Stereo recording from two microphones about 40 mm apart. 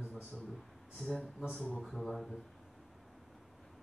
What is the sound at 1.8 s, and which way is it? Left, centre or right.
Speech, centre.